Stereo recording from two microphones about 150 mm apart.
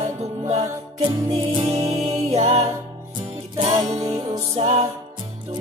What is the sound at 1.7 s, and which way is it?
Music, 45° right (ahead or behind).